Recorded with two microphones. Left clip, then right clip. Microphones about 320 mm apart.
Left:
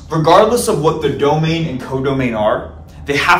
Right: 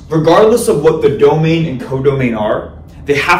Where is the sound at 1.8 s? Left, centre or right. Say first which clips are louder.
Right 4 dB; centre.